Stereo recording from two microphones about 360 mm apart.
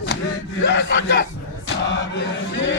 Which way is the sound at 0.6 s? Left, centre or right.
Left.